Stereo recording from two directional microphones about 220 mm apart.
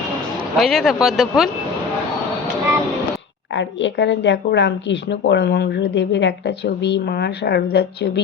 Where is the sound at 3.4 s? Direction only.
55° left (ahead or behind).